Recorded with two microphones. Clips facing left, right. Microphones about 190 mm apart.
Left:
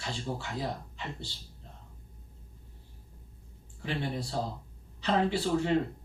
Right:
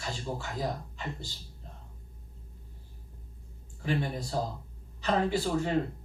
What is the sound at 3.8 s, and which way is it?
A man's voice, 45° right (ahead or behind).